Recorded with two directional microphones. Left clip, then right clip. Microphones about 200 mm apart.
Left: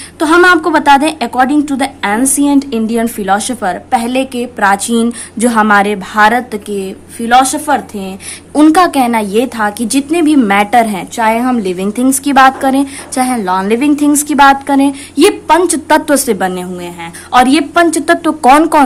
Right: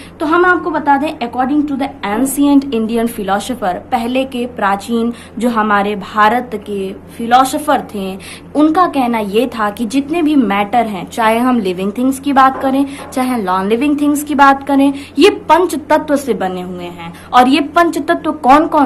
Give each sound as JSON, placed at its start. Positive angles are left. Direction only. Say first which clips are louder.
{"t": 0.2, "sound": "a woman's voice", "louder": "left 4 dB", "side_deg": 50}
{"t": 8.5, "sound": "a woman's voice", "louder": "left 4 dB", "side_deg": 45}